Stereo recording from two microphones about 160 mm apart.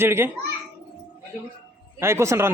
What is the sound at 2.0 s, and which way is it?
Speech, 15° right (ahead or behind).